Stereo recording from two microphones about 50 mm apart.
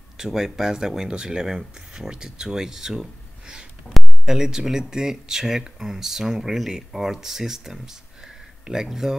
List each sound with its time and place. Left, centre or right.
0.2 s speech: centre
3.9 s speech: centre